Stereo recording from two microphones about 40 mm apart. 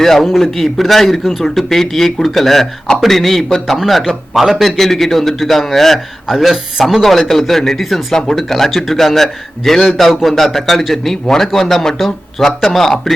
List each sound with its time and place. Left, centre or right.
0.0 s a man's voice: centre
1.5 s a man's voice: centre
4.8 s a man's voice: centre
6.2 s a man's voice: centre
8.1 s a man's voice: centre
10.1 s a man's voice: centre
10.3 s a man's voice: centre